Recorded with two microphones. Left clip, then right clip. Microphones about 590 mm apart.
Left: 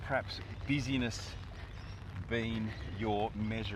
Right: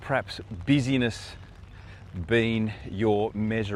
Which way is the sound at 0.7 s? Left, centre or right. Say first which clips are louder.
Right 10 dB; right.